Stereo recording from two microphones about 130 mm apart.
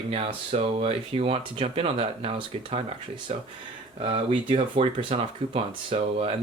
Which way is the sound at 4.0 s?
40° right (ahead or behind).